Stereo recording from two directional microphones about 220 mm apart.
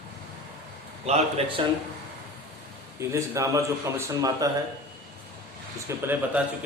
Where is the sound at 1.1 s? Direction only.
30° right (ahead or behind).